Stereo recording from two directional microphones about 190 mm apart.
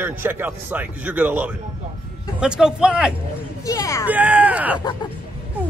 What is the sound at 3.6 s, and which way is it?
Speech, 15° left (ahead or behind).